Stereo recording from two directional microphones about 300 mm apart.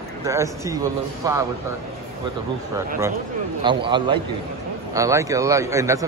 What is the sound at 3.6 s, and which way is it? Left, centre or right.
Speech, centre.